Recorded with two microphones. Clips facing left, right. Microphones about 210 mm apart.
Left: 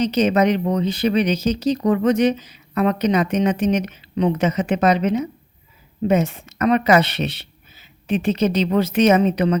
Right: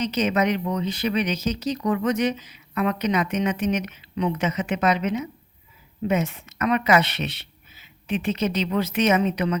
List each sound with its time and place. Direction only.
0.0 s speech: 30° left (ahead or behind)